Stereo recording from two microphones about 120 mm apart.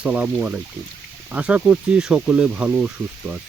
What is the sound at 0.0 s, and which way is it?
Speech, 10° right (ahead or behind).